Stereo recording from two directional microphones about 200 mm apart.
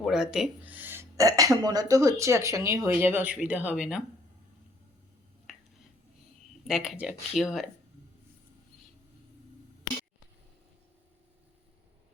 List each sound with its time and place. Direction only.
0.0 s speech: centre (ahead or behind)
5.5 s finger snapping: centre (ahead or behind)
6.7 s speech: centre (ahead or behind)